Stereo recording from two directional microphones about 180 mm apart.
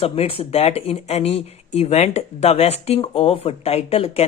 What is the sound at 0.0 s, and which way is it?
Speech, 30° left (ahead or behind).